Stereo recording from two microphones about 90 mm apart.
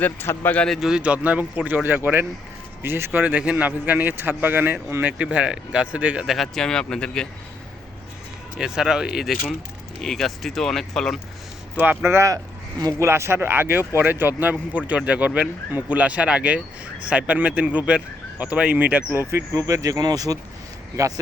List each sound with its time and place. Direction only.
0.0 s a man's voice: 25° left (ahead or behind)
0.8 s a man's voice: 5° right (ahead or behind); by 5.1 s 20° right (ahead or behind)
5.1 s speech: 10° right (ahead or behind)
6.2 s speech: centre (ahead or behind)
8.5 s speech: 5° right (ahead or behind)
10.0 s speech: 5° left (ahead or behind)
12.0 s a man's voice: 35° right (ahead or behind)
19.2 s speech: 35° right (ahead or behind)